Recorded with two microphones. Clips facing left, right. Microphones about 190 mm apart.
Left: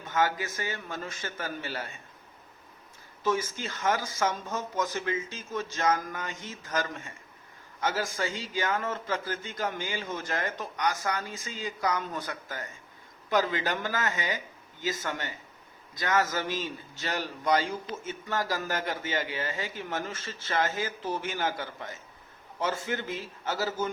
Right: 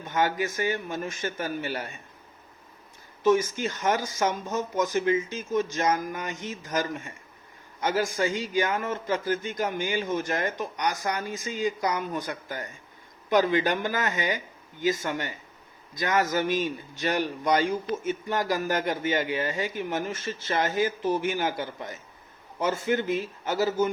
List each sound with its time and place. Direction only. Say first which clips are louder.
0.1 s a man's voice: right 2 dB; 15° right (ahead or behind)
3.2 s a man's voice: right 7 dB; 15° right (ahead or behind)